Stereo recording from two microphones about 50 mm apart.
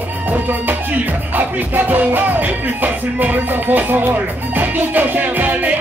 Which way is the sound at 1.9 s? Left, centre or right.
Right.